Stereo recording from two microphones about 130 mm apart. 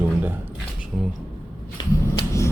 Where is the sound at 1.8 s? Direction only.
35° left (ahead or behind).